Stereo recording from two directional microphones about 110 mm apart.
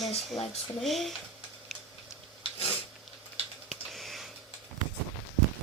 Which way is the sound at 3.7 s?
Centre (ahead or behind).